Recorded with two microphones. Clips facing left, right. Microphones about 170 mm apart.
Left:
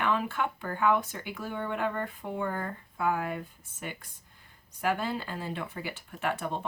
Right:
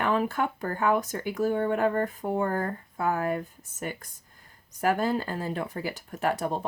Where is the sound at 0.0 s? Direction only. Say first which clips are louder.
Right 3 dB; 40° right (ahead or behind).